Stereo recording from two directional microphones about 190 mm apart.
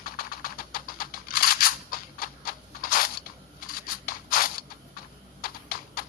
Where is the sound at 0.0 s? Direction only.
50° left (ahead or behind).